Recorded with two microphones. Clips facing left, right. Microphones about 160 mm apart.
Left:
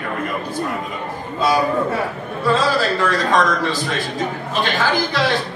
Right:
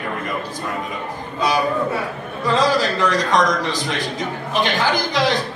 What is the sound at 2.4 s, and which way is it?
A man's voice, 15° right (ahead or behind).